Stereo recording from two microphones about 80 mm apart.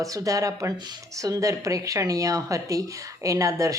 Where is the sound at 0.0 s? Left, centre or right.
Right.